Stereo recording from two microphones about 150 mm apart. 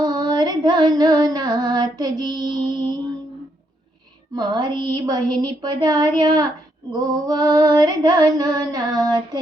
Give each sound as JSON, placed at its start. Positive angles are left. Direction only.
{"t": 0.0, "sound": "female singing", "side_deg": -30}
{"t": 4.4, "sound": "female singing", "side_deg": -25}